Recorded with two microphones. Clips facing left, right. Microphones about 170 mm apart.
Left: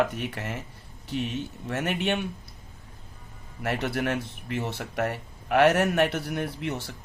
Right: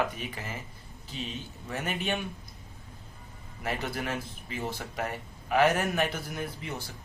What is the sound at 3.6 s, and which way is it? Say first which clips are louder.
Speech: left 5 dB; 65° left (ahead or behind).